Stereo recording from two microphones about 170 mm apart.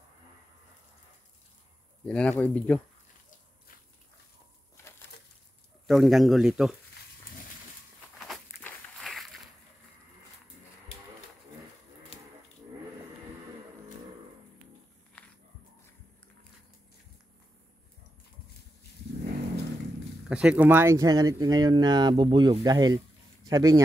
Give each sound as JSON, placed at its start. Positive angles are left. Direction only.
{"t": 2.0, "sound": "speech", "side_deg": 5}
{"t": 5.9, "sound": "speech", "side_deg": 0}
{"t": 8.5, "sound": "walk", "side_deg": 15}
{"t": 8.9, "sound": "a sound", "side_deg": 0}
{"t": 20.2, "sound": "speech", "side_deg": -5}